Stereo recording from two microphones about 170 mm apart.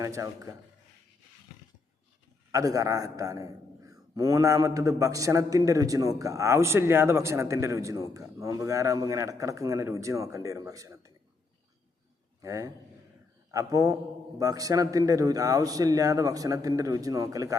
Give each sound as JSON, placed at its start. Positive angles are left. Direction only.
{"t": 0.0, "sound": "a man's voice", "side_deg": -20}
{"t": 2.5, "sound": "a man's voice", "side_deg": -20}
{"t": 12.4, "sound": "a man's voice", "side_deg": -20}